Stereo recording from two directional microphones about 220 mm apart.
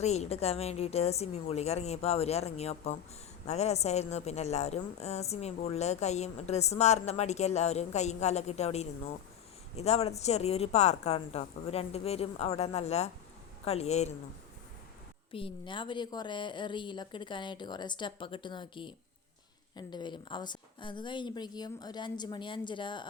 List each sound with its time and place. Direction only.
0.0 s a woman's voice: 30° left (ahead or behind)
15.3 s a woman's voice: 25° left (ahead or behind)